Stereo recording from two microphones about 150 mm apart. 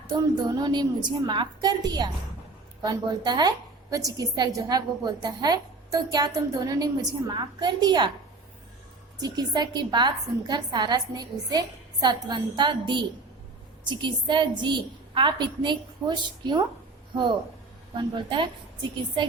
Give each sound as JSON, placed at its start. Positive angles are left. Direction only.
{"t": 0.3, "sound": "a woman's voice", "side_deg": -30}
{"t": 9.2, "sound": "a woman's voice", "side_deg": -25}
{"t": 17.9, "sound": "a woman's voice", "side_deg": -30}